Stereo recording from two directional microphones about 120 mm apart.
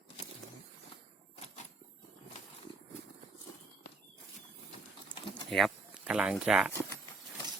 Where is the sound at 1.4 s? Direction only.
80° left.